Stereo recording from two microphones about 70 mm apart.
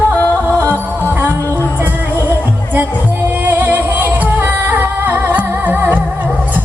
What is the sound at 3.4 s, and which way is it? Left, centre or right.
Music, right.